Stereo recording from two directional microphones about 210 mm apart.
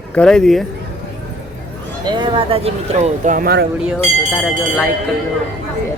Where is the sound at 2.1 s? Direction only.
25° right (ahead or behind); by 3.7 s 50° right (ahead or behind).